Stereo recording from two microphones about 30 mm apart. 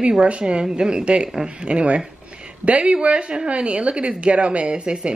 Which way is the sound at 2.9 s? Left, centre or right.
Right.